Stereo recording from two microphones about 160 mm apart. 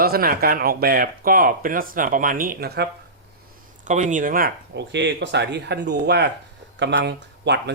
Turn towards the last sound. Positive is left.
turn(degrees=-90)